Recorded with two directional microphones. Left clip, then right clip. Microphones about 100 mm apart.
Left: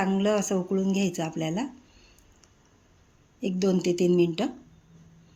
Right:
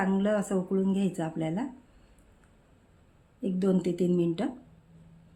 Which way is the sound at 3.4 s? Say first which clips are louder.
Left 3 dB; 35° left (ahead or behind).